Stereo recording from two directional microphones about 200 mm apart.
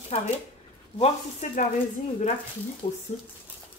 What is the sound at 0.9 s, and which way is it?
Speech, 35° left (ahead or behind).